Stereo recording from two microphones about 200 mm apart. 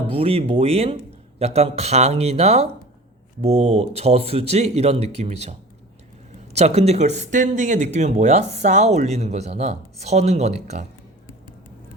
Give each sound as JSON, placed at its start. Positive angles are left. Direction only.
{"t": 0.1, "sound": "speech", "side_deg": -30}